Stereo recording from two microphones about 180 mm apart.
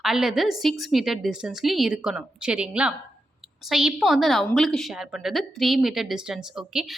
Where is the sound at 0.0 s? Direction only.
Centre (ahead or behind).